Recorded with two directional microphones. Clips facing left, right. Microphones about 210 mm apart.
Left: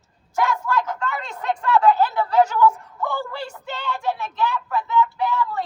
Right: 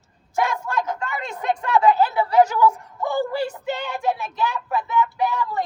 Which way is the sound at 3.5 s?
15° right (ahead or behind).